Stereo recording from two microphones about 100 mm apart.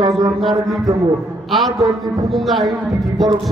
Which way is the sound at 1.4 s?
Centre (ahead or behind).